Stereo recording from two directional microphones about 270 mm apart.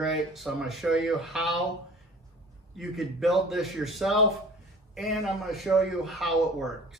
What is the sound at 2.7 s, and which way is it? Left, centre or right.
Speech, centre.